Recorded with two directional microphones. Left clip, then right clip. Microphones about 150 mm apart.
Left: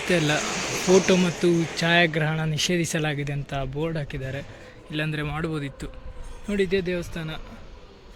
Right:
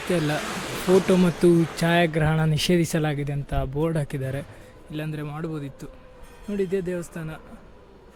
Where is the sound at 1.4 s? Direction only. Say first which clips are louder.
Right 3 dB; 35° right (ahead or behind).